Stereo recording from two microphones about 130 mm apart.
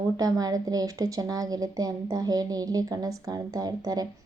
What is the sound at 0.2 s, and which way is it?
A woman's voice, 30° right (ahead or behind).